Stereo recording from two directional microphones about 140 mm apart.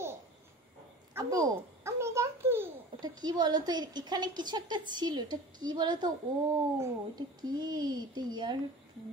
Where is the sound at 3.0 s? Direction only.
30° right (ahead or behind).